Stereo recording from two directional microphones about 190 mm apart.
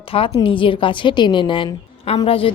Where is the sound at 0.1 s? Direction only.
30° left (ahead or behind).